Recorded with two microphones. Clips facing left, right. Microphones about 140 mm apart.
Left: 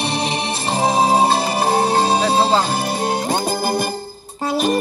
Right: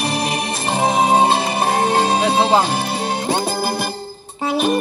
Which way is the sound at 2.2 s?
10° right (ahead or behind).